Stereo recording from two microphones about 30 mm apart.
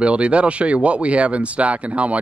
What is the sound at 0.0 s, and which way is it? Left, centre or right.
Speech, right.